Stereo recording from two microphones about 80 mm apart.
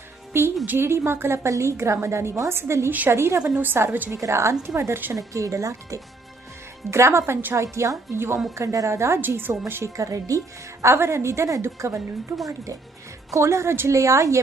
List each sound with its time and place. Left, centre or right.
0.6 s a woman's voice: right
2.9 s a woman's voice: right
3.2 s a woman's voice: right
4.2 s a woman's voice: right
9.9 s speech: right
10.8 s a woman's voice: right
13.3 s a woman's voice: right